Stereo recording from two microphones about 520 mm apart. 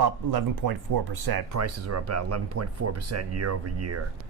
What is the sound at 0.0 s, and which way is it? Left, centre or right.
Speech, right.